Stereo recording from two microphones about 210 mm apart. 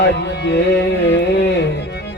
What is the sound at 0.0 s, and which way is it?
Music, 55° left (ahead or behind).